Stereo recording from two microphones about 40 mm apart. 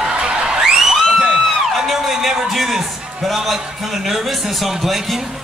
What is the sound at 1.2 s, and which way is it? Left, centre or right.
Music, centre.